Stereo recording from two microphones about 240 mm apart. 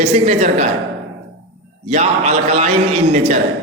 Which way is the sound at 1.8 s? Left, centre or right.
Right.